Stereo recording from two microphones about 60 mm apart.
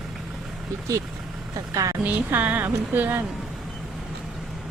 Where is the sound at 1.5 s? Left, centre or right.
Right.